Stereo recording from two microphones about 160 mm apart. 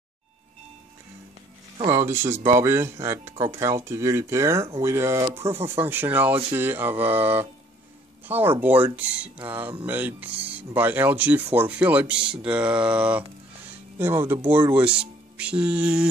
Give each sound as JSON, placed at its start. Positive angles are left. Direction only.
{"t": 1.9, "sound": "speech", "side_deg": -15}